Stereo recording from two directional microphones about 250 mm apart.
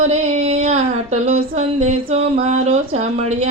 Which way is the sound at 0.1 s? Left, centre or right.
Right.